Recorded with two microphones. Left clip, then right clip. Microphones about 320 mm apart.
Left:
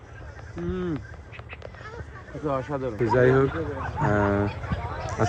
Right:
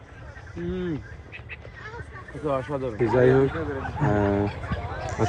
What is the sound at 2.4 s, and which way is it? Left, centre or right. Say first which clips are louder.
Speech: right 1 dB; centre.